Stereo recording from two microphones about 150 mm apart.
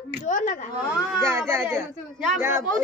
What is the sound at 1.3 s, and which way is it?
Speech, 20° right (ahead or behind).